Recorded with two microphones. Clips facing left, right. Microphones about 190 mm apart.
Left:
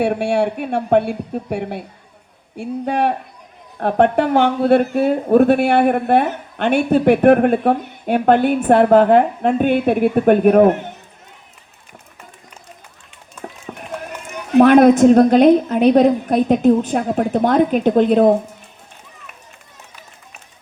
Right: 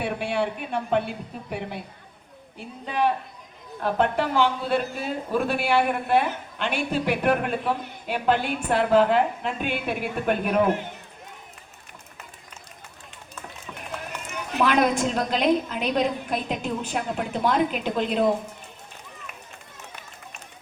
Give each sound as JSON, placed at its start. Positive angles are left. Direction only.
{"t": 0.2, "sound": "speech", "side_deg": 70}
{"t": 13.7, "sound": "a sound", "side_deg": 55}
{"t": 14.5, "sound": "a woman's voice", "side_deg": 50}